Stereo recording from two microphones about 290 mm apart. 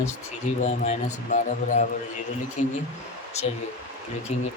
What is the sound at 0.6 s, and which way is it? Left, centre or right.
Speech, left.